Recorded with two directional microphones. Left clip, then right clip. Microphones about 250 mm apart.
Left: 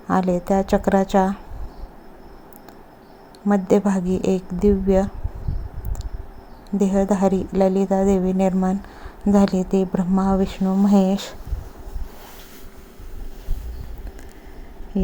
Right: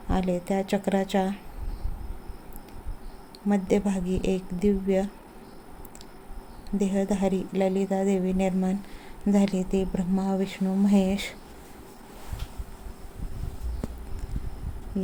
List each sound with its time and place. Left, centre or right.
0.1 s speech: centre
3.5 s speech: centre
6.7 s speech: centre